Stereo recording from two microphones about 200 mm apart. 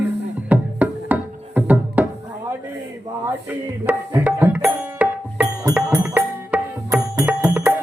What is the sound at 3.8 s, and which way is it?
Music, 10° right (ahead or behind).